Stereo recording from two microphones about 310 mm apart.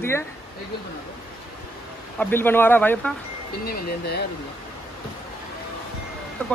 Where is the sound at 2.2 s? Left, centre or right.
Centre.